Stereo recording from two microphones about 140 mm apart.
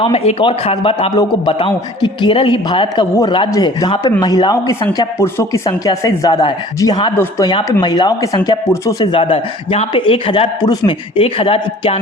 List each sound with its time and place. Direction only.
0.0 s a man's voice: 45° left (ahead or behind); by 9.0 s 25° left (ahead or behind)
9.1 s a man's voice: 40° left (ahead or behind)